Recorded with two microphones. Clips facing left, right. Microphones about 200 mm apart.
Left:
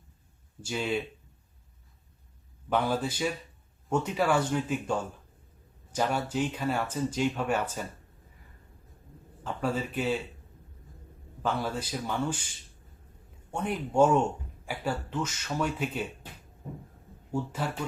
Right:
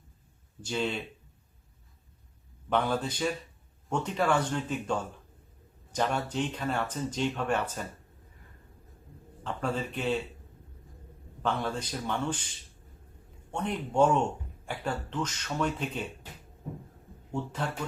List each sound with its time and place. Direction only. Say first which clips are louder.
0.6 s speech: left 1 dB; 10° left (ahead or behind)
2.6 s speech: left 1 dB; 5° left (ahead or behind)
9.4 s speech: left 1 dB; 5° left (ahead or behind)
11.4 s speech: even; 5° left (ahead or behind)
13.5 s speech: left 1 dB; 10° left (ahead or behind)
17.3 s speech: left 2 dB; 10° left (ahead or behind)